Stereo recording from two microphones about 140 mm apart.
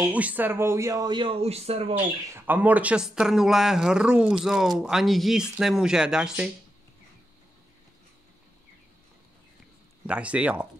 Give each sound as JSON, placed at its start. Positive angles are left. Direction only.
{"t": 0.1, "sound": "speech", "side_deg": -10}
{"t": 2.3, "sound": "speech", "side_deg": -15}
{"t": 10.0, "sound": "speech", "side_deg": -10}